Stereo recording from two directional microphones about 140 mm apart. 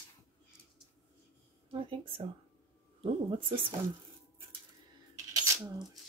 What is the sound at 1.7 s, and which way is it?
Speech, 40° right (ahead or behind).